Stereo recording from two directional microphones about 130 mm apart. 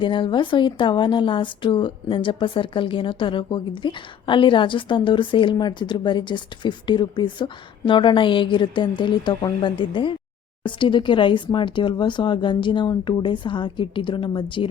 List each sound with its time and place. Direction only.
0.0 s a woman's voice: 40° left (ahead or behind)